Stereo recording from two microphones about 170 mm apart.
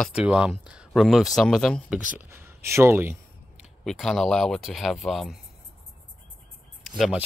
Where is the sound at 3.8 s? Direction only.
Centre (ahead or behind).